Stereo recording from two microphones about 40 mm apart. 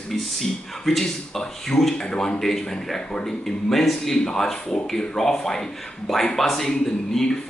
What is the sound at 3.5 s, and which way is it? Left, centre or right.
Speech, centre.